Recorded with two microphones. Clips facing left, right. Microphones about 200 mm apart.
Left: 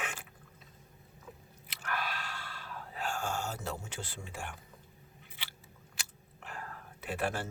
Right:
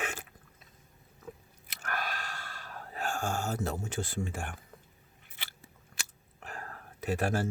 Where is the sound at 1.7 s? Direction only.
45° right (ahead or behind).